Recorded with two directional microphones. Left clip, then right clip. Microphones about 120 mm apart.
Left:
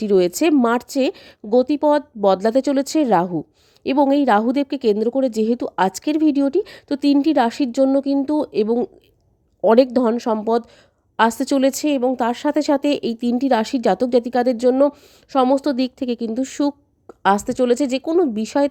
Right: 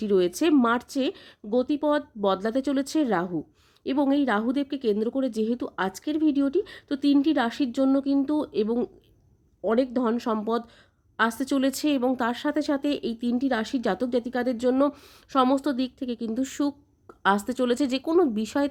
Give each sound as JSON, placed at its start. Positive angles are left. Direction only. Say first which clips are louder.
{"t": 0.0, "sound": "a woman's voice", "louder": "left 7 dB", "side_deg": 60}
{"t": 9.6, "sound": "speech", "louder": "left 11 dB", "side_deg": 90}
{"t": 10.2, "sound": "speech", "louder": "left 8 dB", "side_deg": 50}
{"t": 11.2, "sound": "a woman's voice", "louder": "left 8 dB", "side_deg": 65}
{"t": 14.8, "sound": "speech", "louder": "left 7 dB", "side_deg": 35}
{"t": 16.3, "sound": "speech", "louder": "left 6 dB", "side_deg": 40}